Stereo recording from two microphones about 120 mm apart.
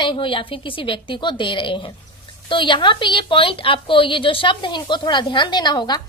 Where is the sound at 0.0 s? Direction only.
45° left (ahead or behind).